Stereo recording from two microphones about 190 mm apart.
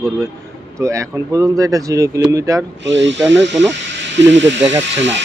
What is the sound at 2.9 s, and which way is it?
Speech, 70° right (ahead or behind).